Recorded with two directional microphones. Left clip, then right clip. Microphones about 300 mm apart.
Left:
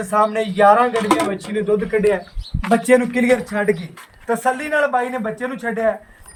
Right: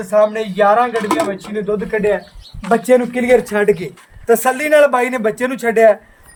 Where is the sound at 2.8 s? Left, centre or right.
Centre.